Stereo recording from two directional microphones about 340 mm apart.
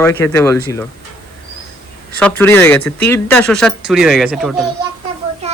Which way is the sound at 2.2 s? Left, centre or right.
Centre.